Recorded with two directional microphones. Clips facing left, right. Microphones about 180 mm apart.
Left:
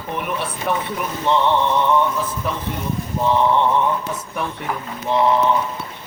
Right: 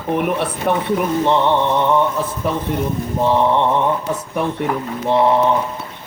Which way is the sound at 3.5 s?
20° right (ahead or behind).